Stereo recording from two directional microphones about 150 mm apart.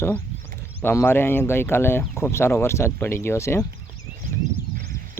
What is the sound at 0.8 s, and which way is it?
Speech, 15° left (ahead or behind).